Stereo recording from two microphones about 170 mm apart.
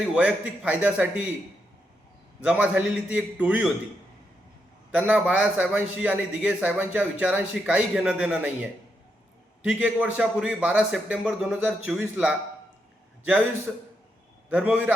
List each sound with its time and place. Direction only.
0.0 s a man's voice: 5° right (ahead or behind)
2.4 s a man's voice: 5° right (ahead or behind)
4.9 s a man's voice: 5° right (ahead or behind)
9.6 s a man's voice: 10° right (ahead or behind)